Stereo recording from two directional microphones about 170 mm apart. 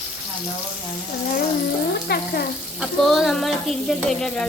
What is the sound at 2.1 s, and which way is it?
Frying, 70° left (ahead or behind).